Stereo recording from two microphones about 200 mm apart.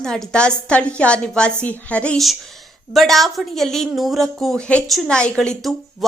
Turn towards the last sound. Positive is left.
turn(degrees=0)  # may be behind; listen again after turning